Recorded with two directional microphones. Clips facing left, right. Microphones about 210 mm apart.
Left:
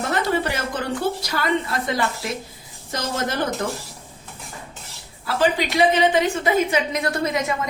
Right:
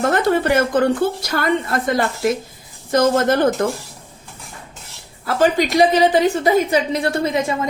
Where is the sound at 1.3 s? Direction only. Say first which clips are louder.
Right 4 dB; 50° right (ahead or behind).